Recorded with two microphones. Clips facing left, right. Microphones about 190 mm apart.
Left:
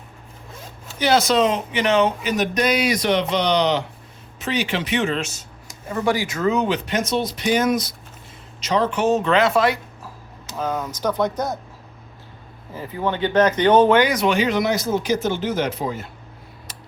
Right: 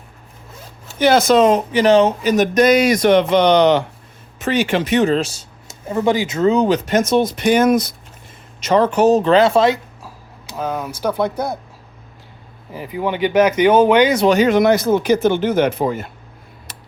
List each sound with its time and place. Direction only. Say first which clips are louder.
0.9 s speech: right 5 dB; 50° right (ahead or behind); by 9.7 s 25° right (ahead or behind)
10.0 s speech: right 1 dB; 10° right (ahead or behind)
12.7 s speech: right 3 dB; 15° right (ahead or behind)
14.1 s speech: right 6 dB; 30° right (ahead or behind)
14.3 s speech: right 7 dB; 50° right (ahead or behind)
16.7 s a sound: right 3 dB; 55° right (ahead or behind)